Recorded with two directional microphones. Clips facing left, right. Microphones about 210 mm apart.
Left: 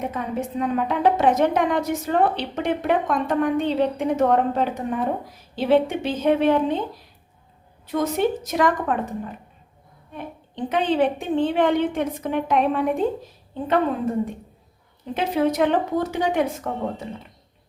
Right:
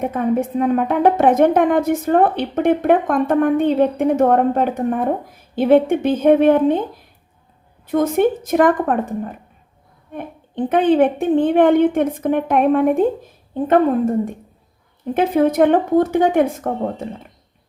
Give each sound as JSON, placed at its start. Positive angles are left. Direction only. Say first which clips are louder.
{"t": 0.0, "sound": "a woman's voice", "louder": "right 8 dB", "side_deg": -55}
{"t": 7.9, "sound": "a woman's voice", "louder": "right 6 dB", "side_deg": -55}